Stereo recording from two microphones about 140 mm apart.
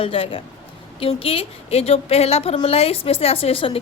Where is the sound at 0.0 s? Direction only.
40° left (ahead or behind).